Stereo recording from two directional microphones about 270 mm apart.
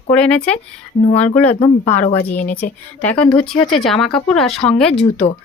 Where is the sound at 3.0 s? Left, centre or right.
Centre.